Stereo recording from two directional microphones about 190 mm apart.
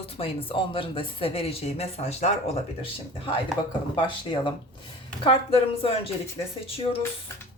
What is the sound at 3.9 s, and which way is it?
A woman's voice, 25° left (ahead or behind).